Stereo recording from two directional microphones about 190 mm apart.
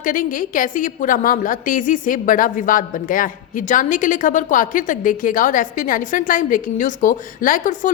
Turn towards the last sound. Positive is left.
turn(degrees=40)  # may be behind; listen again after turning